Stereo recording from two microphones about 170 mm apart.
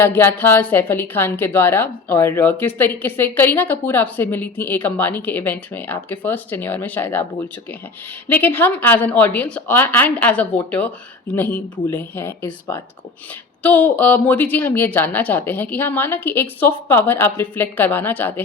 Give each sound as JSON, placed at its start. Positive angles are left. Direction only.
{"t": 0.0, "sound": "a woman's voice", "side_deg": 15}